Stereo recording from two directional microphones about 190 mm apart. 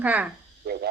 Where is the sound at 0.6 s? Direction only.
60° right (ahead or behind).